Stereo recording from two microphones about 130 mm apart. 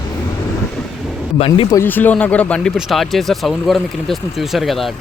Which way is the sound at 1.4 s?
45° left (ahead or behind).